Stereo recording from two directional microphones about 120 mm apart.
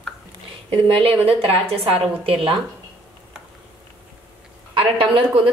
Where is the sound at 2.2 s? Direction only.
50° right (ahead or behind).